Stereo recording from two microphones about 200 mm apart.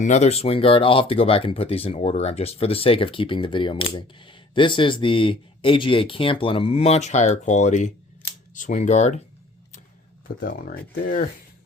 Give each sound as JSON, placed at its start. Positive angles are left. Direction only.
{"t": 0.0, "sound": "speech", "side_deg": 35}
{"t": 10.4, "sound": "speech", "side_deg": 45}